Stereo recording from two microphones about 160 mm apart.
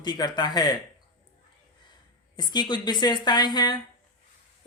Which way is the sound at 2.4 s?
25° left (ahead or behind).